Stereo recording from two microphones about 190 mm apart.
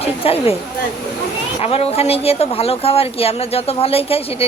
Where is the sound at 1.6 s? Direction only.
30° left (ahead or behind).